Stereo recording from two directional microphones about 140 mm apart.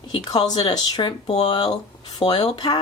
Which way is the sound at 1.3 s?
50° left (ahead or behind).